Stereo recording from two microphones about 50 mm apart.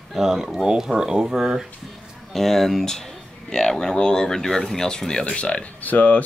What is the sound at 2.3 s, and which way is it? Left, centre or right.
Speech, centre.